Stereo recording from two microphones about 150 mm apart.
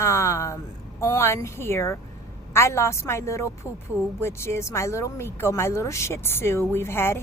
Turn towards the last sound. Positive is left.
turn(degrees=15)  # may be behind; listen again after turning